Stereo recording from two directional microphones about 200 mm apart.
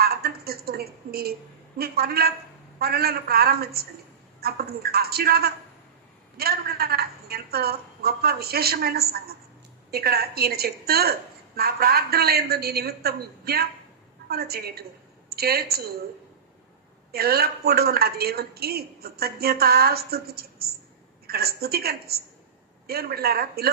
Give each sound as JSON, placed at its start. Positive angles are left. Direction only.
{"t": 0.0, "sound": "a sound", "side_deg": -50}
{"t": 1.8, "sound": "a woman's voice", "side_deg": -50}
{"t": 17.1, "sound": "a woman's voice", "side_deg": -50}